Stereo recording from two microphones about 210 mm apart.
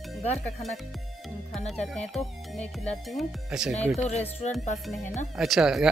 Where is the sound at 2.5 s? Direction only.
Centre (ahead or behind).